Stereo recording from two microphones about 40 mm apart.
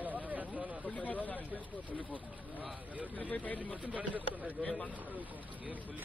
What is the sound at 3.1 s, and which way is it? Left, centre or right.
Speech, left.